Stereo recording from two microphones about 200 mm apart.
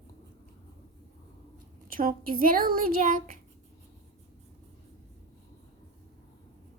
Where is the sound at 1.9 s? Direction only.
45° right (ahead or behind).